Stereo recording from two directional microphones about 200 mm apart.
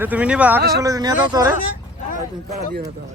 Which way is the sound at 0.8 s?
20° right (ahead or behind).